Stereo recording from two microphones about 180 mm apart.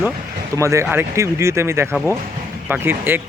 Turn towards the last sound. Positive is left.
turn(degrees=-10)  # may be behind; listen again after turning